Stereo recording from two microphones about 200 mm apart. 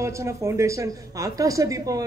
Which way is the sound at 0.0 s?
15° right (ahead or behind).